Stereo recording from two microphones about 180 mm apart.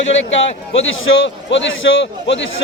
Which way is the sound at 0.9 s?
90° left.